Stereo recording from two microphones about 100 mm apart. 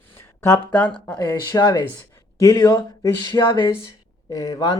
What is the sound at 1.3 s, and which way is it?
Speech, 40° left (ahead or behind).